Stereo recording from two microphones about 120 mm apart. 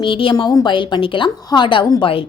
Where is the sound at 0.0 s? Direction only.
45° left (ahead or behind).